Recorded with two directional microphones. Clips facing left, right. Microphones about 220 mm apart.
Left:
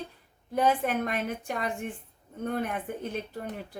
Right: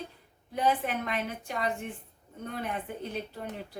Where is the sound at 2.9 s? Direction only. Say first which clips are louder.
Left 3 dB; 50° left (ahead or behind).